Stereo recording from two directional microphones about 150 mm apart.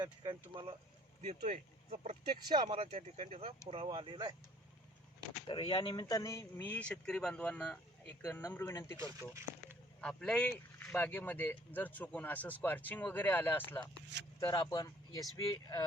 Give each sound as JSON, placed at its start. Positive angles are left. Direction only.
{"t": 0.0, "sound": "speech", "side_deg": -30}
{"t": 1.2, "sound": "speech", "side_deg": -50}
{"t": 2.5, "sound": "speech", "side_deg": -30}
{"t": 5.5, "sound": "speech", "side_deg": 30}
{"t": 6.6, "sound": "speech", "side_deg": 10}
{"t": 8.4, "sound": "speech", "side_deg": 20}
{"t": 9.0, "sound": "speech", "side_deg": -20}
{"t": 10.0, "sound": "speech", "side_deg": 5}
{"t": 14.5, "sound": "speech", "side_deg": 30}